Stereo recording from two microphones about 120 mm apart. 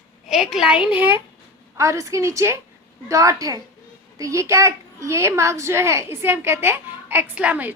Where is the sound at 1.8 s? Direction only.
25° right (ahead or behind).